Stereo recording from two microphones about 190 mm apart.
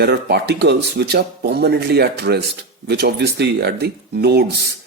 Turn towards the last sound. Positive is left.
turn(degrees=-60)  # may be behind; listen again after turning